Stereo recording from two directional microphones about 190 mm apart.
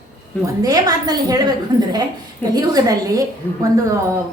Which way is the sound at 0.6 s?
20° right (ahead or behind).